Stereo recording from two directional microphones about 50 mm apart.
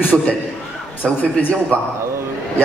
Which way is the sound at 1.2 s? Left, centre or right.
Left.